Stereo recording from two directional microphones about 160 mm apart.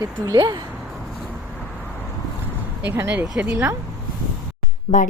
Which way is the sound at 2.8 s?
10° right (ahead or behind).